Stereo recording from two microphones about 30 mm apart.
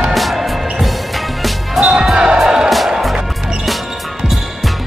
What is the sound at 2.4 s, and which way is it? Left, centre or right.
Music, centre.